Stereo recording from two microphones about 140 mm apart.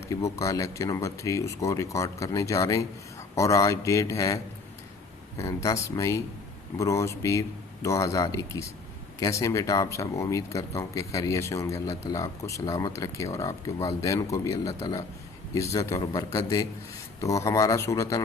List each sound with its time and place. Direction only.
0.1 s speech: 25° left (ahead or behind)
5.4 s speech: 20° left (ahead or behind)